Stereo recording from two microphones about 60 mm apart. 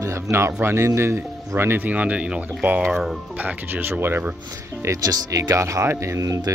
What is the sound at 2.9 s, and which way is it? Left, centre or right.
Speech, centre.